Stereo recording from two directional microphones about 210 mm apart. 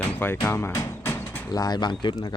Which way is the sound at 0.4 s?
10° left (ahead or behind).